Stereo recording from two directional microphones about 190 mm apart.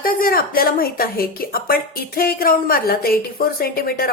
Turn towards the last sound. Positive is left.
turn(degrees=55)  # may be behind; listen again after turning